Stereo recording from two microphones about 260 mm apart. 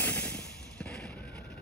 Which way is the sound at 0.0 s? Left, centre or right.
Centre.